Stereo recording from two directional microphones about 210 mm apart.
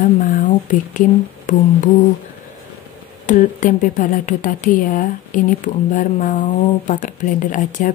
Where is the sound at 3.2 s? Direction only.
35° left (ahead or behind).